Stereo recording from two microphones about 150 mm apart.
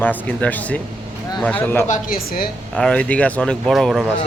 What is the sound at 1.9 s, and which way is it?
Speech, 70° left (ahead or behind).